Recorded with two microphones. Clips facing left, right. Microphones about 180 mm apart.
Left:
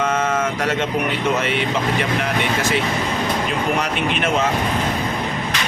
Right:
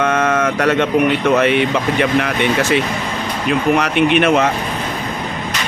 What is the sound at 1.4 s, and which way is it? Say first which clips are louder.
Speech: right 6 dB; 60° right (ahead or behind).